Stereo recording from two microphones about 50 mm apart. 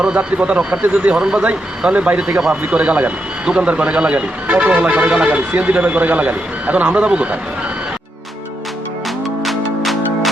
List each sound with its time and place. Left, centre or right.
0.0 s speech: right
9.4 s music: centre